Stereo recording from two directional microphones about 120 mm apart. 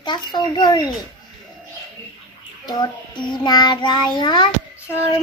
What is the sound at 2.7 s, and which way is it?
Child singing, 40° left (ahead or behind).